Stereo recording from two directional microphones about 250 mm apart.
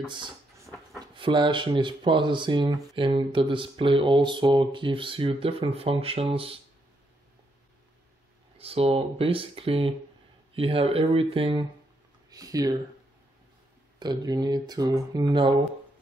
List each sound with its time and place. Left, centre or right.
0.0 s a sound: centre
0.9 s speech: centre
8.5 s speech: right
13.9 s speech: centre